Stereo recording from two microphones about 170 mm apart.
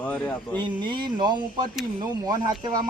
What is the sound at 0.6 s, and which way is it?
Speech, 25° right (ahead or behind).